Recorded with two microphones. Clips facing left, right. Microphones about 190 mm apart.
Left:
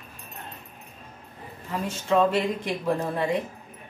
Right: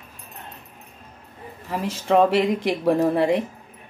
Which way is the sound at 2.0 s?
75° right (ahead or behind).